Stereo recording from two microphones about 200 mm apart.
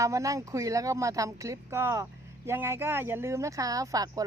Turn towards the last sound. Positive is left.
turn(degrees=-15)  # may be behind; listen again after turning